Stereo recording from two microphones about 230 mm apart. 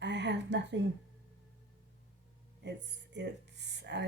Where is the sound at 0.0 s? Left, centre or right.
Right.